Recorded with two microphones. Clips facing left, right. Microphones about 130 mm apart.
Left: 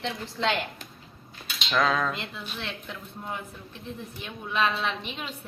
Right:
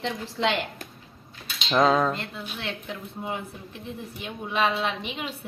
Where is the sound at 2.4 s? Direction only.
5° right (ahead or behind).